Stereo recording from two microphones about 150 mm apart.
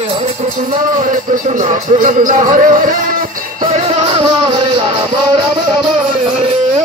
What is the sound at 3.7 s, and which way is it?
Music, 40° right (ahead or behind).